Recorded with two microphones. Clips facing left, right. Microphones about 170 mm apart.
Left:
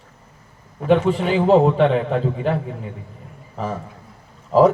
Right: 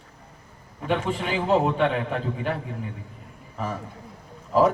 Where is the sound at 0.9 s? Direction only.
35° left (ahead or behind).